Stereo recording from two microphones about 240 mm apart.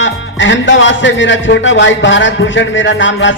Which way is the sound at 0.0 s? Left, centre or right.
Left.